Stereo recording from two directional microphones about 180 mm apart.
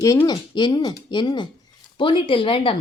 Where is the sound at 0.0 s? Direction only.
20° left (ahead or behind).